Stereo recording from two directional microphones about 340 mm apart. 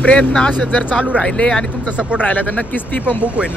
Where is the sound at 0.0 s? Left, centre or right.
Centre.